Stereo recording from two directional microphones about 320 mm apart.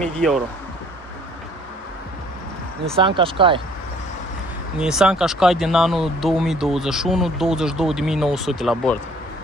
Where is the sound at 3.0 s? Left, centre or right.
Centre.